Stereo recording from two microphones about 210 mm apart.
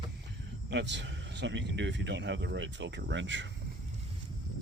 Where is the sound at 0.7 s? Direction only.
55° right (ahead or behind).